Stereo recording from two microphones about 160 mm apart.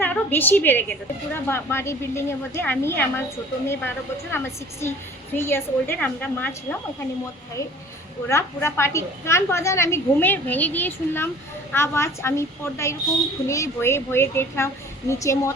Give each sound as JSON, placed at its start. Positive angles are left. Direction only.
{"t": 0.0, "sound": "a woman's voice", "side_deg": 10}
{"t": 8.3, "sound": "a woman's voice", "side_deg": 15}